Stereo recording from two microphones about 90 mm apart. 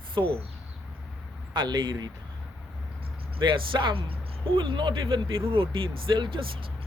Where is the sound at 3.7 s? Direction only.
65° right (ahead or behind).